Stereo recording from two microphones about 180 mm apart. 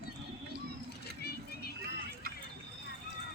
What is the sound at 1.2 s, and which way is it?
Vehicle, 60° left (ahead or behind).